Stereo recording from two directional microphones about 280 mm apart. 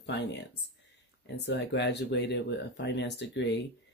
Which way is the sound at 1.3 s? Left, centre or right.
Left.